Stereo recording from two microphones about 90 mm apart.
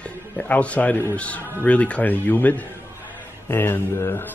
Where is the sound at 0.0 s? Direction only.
15° left (ahead or behind).